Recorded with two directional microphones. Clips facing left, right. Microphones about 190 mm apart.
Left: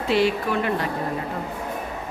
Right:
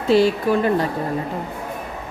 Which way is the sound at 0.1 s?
35° right (ahead or behind).